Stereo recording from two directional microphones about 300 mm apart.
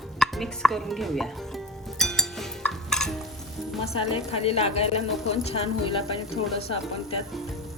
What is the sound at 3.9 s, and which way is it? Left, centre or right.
A woman's voice, centre.